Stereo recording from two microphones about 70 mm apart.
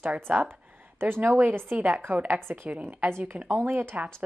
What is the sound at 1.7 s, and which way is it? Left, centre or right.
Speech, centre.